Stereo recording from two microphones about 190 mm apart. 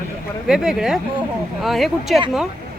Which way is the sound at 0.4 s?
5° right (ahead or behind).